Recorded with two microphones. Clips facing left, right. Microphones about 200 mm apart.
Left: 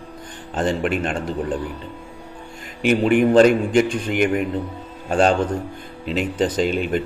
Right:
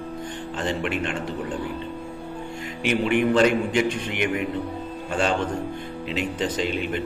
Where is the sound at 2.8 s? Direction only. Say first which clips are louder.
Left 5 dB; 45° left (ahead or behind).